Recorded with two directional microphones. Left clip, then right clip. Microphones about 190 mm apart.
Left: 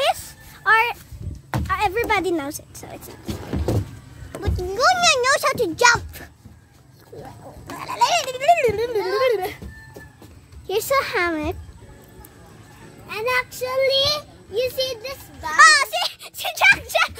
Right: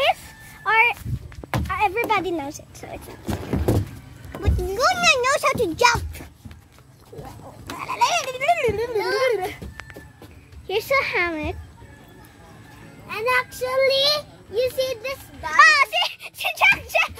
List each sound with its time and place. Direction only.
0.7 s a sound: 10° left (ahead or behind)
2.0 s a woman's voice: 20° left (ahead or behind)
2.8 s a child's voice: 5° left (ahead or behind)
4.3 s a child's voice: centre (ahead or behind)
7.7 s speech: 5° left (ahead or behind)
9.0 s speech: 35° right (ahead or behind)
9.3 s a child's voice: centre (ahead or behind)
10.7 s child singing: 15° left (ahead or behind)
13.1 s child singing: 15° left (ahead or behind); by 14.2 s centre (ahead or behind)
14.5 s a sound: 15° left (ahead or behind)